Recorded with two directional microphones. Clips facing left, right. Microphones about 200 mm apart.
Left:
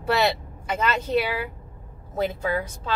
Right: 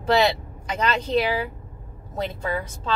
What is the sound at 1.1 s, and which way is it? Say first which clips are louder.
Speech: right 1 dB; 10° left (ahead or behind).